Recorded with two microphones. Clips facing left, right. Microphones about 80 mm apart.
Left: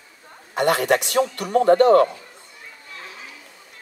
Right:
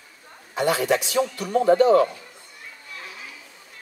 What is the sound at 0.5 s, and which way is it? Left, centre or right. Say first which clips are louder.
A man's voice: left 3 dB; left.